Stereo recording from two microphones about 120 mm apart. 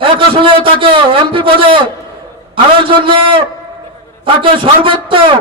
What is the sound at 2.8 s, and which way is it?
A man's voice, 45° right (ahead or behind).